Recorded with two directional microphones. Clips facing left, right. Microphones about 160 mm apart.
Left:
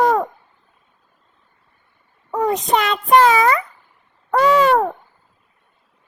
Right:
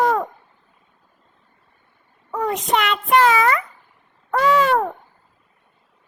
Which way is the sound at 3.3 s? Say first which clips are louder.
Left 2 dB; 35° left (ahead or behind).